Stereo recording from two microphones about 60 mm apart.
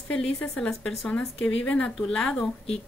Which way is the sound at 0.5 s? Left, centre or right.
Centre.